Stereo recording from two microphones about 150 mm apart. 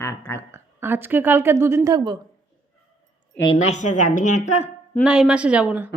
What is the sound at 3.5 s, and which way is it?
A woman's voice, 50° left (ahead or behind).